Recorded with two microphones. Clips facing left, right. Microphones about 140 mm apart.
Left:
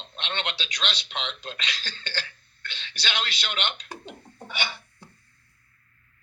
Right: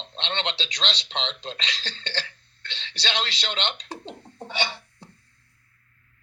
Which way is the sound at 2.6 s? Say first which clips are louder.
Right 2 dB; 30° right (ahead or behind).